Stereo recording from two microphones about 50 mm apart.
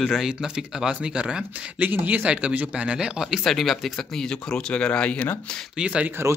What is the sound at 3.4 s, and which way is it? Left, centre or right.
Speech, centre.